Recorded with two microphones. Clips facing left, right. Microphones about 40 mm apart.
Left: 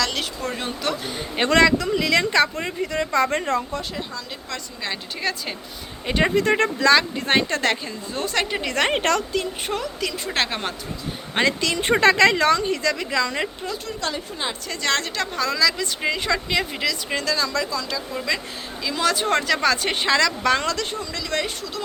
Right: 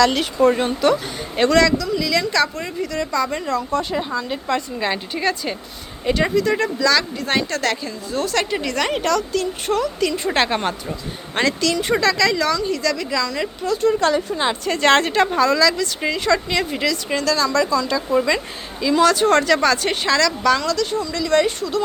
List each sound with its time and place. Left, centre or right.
0.0 s a woman's voice: centre
1.5 s speech: left
3.9 s a woman's voice: centre
5.2 s a woman's voice: centre
6.3 s a woman's voice: left; by 8.7 s centre
8.7 s speech: left
9.3 s a woman's voice: centre
11.3 s speech: centre
11.8 s speech: left
14.1 s a woman's voice: right
14.6 s a woman's voice: right
15.4 s a woman's voice: centre; by 20.6 s left
20.6 s speech: left
21.0 s a woman's voice: centre